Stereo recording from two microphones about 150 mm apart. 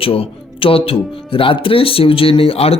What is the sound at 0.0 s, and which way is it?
Speech, 40° left (ahead or behind).